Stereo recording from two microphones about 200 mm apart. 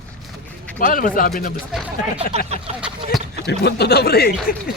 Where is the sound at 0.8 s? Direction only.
45° left (ahead or behind).